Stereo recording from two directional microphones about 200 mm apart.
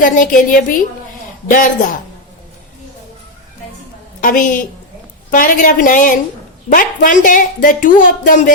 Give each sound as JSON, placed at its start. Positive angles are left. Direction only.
{"t": 0.0, "sound": "a man's voice", "side_deg": 40}
{"t": 4.2, "sound": "a woman's voice", "side_deg": 40}